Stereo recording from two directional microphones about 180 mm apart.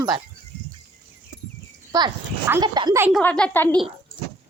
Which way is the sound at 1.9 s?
20° right (ahead or behind).